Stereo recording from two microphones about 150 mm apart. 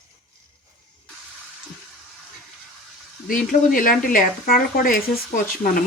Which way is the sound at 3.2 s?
65° left (ahead or behind).